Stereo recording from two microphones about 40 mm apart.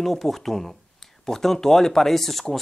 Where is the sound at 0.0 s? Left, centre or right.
Centre.